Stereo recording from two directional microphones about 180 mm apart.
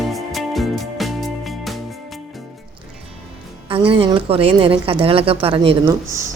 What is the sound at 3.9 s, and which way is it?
Speech, 30° right (ahead or behind).